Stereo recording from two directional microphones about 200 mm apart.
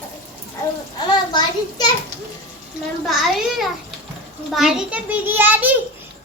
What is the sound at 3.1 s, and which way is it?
A child's voice, centre (ahead or behind).